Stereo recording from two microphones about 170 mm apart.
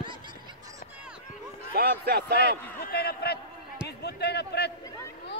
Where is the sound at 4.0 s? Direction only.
75° left (ahead or behind).